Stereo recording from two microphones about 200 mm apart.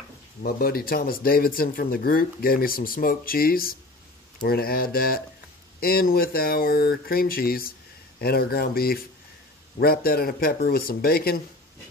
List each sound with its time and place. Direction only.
0.4 s speech: 45° left (ahead or behind)